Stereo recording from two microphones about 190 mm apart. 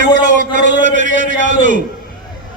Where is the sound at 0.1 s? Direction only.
40° right (ahead or behind).